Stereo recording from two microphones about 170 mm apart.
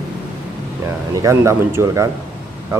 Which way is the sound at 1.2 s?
15° right (ahead or behind).